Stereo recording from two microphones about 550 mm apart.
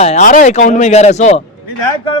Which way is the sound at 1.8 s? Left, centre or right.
Left.